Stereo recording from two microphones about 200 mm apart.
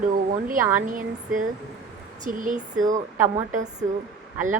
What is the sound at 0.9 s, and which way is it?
Speech, 40° right (ahead or behind).